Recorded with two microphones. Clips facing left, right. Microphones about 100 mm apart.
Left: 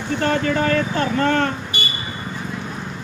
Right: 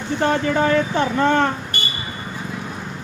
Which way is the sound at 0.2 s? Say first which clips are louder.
Right 2 dB; 15° right (ahead or behind).